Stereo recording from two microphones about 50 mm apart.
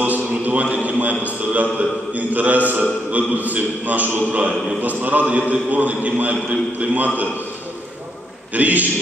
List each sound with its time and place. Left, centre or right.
0.0 s a man's voice: right
8.5 s a man's voice: right